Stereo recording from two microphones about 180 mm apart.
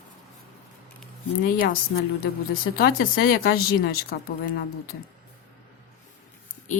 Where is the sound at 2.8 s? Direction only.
60° left (ahead or behind).